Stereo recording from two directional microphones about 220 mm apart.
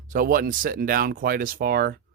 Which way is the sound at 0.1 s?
40° right (ahead or behind).